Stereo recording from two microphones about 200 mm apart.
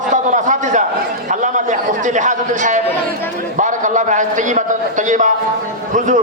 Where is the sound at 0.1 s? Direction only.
40° right (ahead or behind).